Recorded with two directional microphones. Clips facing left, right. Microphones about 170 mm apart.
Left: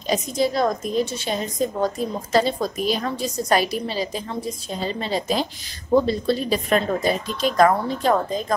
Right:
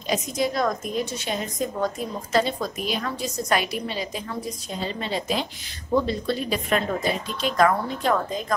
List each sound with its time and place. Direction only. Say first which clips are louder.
0.0 s a woman's voice: left 3 dB; 30° left (ahead or behind)